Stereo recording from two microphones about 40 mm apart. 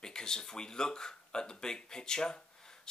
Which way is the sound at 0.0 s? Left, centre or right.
Centre.